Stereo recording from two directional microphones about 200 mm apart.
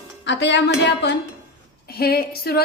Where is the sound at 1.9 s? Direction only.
50° left (ahead or behind).